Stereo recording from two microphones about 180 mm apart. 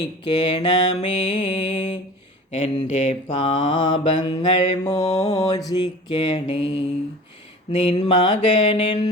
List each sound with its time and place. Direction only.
0.3 s mantra: 30° left (ahead or behind)
5.0 s mantra: 20° left (ahead or behind)